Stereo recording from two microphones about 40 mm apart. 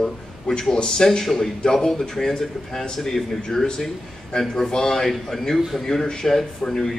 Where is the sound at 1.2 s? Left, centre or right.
Centre.